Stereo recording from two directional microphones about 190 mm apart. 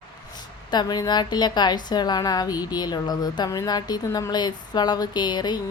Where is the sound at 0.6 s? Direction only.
20° left (ahead or behind).